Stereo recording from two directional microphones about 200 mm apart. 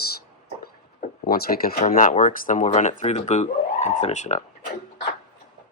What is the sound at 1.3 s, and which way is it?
Speech, 50° left (ahead or behind).